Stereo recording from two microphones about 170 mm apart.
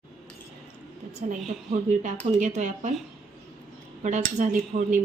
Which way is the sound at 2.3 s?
50° right (ahead or behind).